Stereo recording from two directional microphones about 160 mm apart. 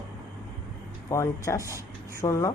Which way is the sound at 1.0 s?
20° left (ahead or behind).